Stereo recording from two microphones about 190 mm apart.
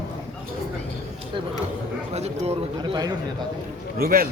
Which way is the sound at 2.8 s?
20° right (ahead or behind).